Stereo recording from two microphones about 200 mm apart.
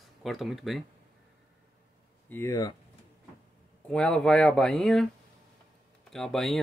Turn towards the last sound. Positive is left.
turn(degrees=0)  # may be behind; listen again after turning